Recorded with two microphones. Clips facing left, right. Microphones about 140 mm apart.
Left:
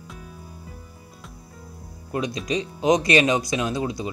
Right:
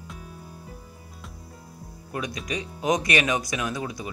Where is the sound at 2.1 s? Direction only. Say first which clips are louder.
Left 6 dB; 25° left (ahead or behind).